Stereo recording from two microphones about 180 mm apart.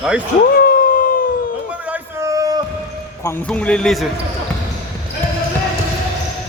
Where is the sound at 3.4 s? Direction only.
5° left (ahead or behind).